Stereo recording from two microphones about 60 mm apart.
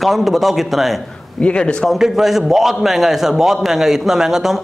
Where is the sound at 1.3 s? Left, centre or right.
Centre.